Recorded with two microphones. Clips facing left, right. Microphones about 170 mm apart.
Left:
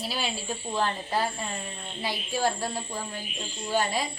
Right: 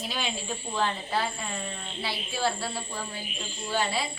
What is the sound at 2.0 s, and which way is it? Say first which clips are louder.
Child singing: left 4 dB; 15° left (ahead or behind).